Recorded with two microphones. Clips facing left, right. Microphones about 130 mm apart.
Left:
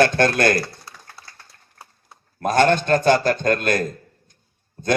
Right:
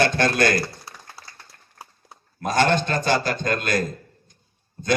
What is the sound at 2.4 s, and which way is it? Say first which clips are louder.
Speech: left 3 dB; 50° left (ahead or behind).